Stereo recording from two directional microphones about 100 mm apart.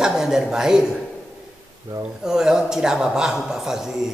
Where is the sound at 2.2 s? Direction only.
5° right (ahead or behind).